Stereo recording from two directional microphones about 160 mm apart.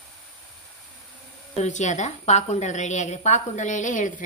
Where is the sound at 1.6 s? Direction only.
50° left (ahead or behind).